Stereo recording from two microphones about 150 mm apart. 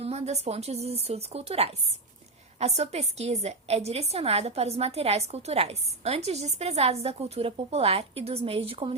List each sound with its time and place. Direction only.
0.0 s a woman's voice: 45° right (ahead or behind)